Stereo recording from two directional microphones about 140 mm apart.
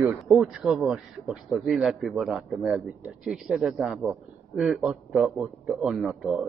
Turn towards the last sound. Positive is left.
turn(degrees=0)  # may be behind; listen again after turning